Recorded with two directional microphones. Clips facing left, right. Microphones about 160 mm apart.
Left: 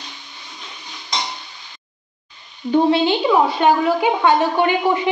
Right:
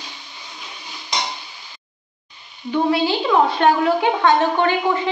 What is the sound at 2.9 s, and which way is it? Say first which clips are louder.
Speech: left 3 dB; 20° left (ahead or behind).